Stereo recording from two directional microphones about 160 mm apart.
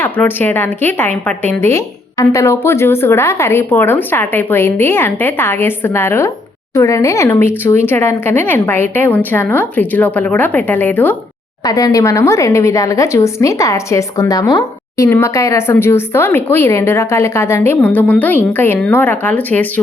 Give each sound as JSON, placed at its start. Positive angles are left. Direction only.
{"t": 0.0, "sound": "speech", "side_deg": 10}
{"t": 11.6, "sound": "speech", "side_deg": 20}